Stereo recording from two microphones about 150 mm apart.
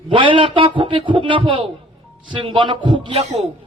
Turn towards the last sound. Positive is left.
turn(degrees=-45)  # may be behind; listen again after turning